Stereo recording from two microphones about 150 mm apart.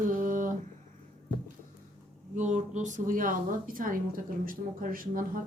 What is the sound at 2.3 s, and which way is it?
Speech, 50° right (ahead or behind).